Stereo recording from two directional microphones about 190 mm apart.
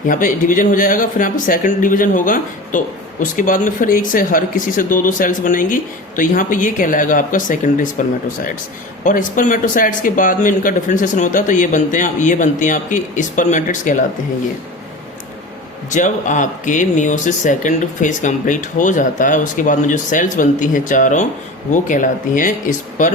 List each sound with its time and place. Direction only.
0.1 s speech: 45° left (ahead or behind)
15.9 s speech: 40° left (ahead or behind)